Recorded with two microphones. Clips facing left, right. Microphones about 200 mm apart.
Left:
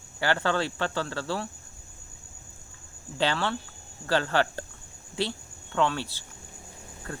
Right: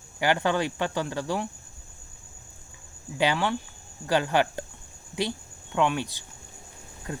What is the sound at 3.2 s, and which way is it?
Speech, 15° right (ahead or behind).